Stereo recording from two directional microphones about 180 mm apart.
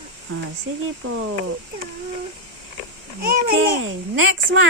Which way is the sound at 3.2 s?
55° right (ahead or behind).